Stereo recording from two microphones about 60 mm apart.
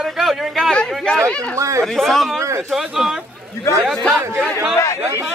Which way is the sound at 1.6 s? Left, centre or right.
Right.